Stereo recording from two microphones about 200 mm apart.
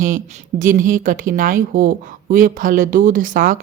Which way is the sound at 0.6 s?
40° right (ahead or behind).